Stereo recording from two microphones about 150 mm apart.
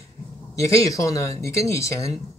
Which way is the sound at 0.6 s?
20° left (ahead or behind).